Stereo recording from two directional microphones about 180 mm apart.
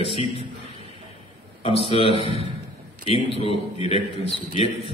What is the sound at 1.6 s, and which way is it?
A man's voice, 35° left (ahead or behind).